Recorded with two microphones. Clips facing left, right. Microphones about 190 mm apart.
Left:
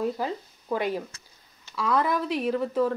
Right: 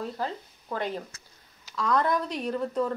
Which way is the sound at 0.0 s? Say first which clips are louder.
Left 5 dB; 10° left (ahead or behind).